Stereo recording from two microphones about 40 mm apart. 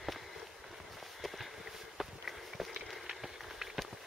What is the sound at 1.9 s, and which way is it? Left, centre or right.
Run, centre.